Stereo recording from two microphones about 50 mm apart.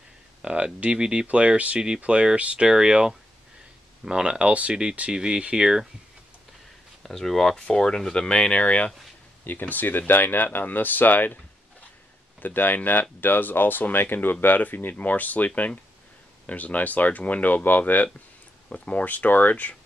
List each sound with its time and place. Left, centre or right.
0.4 s a sound: right
0.9 s speech: centre
7.0 s speech: centre; by 8.9 s left
9.4 s speech: left
12.4 s speech: left